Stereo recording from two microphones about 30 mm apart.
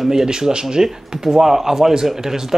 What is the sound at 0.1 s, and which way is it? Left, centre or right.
Speech, right.